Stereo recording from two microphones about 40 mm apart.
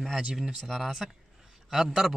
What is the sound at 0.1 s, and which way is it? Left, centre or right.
Speech, centre.